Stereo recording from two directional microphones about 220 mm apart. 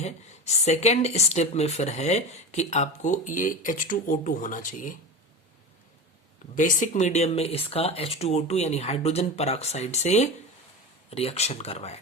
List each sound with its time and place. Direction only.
0.0 s speech: 30° left (ahead or behind)
6.6 s speech: 35° left (ahead or behind)